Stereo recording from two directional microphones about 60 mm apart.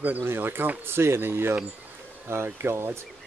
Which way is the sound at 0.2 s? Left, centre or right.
Right.